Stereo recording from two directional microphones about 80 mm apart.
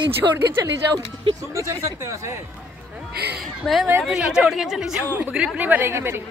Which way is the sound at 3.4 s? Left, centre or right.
Centre.